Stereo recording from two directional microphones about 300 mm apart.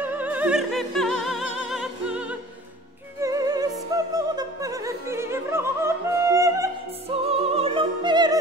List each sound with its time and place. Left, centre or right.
0.0 s opera: centre
7.2 s music: centre